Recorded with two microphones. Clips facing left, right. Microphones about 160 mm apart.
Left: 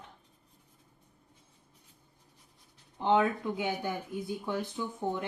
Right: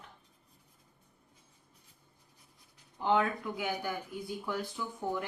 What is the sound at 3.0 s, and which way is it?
Speech, 20° left (ahead or behind).